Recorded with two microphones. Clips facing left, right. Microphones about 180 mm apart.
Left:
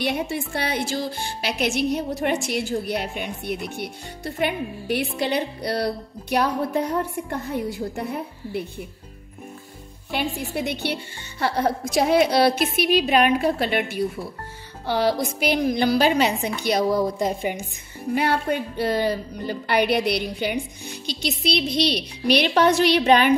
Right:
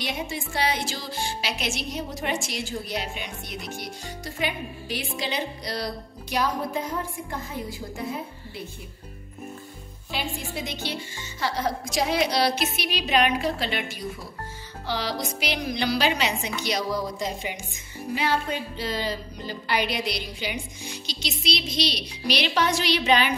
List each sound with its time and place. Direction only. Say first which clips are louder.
0.0 s speech: left 6 dB; 60° left (ahead or behind)
10.1 s a woman's voice: left 5 dB; 60° left (ahead or behind)